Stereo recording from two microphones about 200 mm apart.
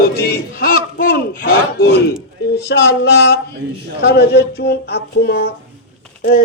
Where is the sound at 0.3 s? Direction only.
45° left (ahead or behind).